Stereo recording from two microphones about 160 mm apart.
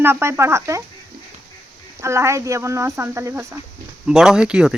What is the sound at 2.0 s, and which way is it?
Speech, 20° right (ahead or behind).